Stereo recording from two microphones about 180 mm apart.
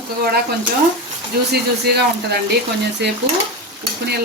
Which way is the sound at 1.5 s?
65° right (ahead or behind).